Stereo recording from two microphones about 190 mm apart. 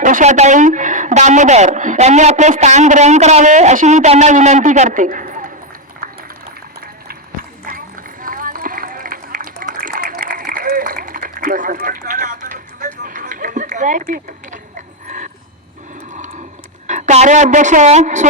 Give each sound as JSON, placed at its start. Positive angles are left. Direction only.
{"t": 0.0, "sound": "a woman's voice", "side_deg": -40}
{"t": 8.2, "sound": "run", "side_deg": -45}
{"t": 14.1, "sound": "a sound", "side_deg": -40}
{"t": 16.8, "sound": "a woman's voice", "side_deg": -40}